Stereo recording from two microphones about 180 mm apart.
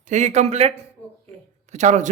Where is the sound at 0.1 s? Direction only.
40° right (ahead or behind).